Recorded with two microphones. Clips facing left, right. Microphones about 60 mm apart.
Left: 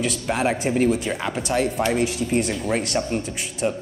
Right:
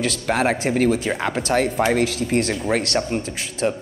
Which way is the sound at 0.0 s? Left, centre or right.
Right.